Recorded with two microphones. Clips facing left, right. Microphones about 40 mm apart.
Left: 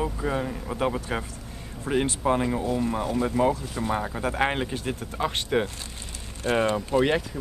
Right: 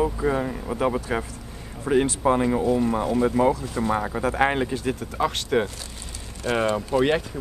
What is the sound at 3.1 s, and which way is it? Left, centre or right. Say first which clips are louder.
Speech: right 3 dB; centre.